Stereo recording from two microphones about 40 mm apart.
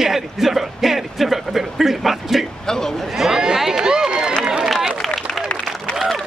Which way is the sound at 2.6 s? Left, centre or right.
Centre.